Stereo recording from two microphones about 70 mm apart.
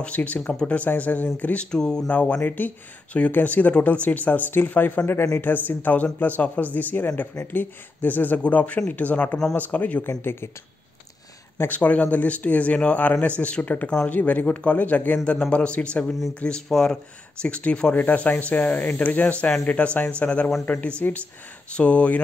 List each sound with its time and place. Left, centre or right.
0.0 s speech: centre
11.5 s speech: left
11.8 s speech: left